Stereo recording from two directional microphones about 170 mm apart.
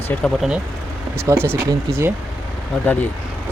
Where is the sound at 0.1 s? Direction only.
10° left (ahead or behind).